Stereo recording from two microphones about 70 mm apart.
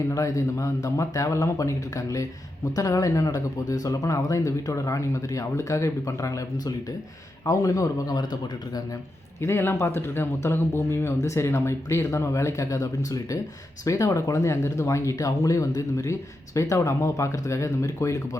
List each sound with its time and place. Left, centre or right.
0.1 s speech: left
9.4 s speech: left